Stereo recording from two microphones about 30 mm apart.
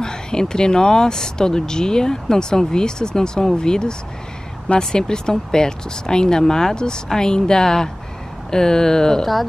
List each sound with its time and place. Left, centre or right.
0.0 s speech: left
9.2 s speech: centre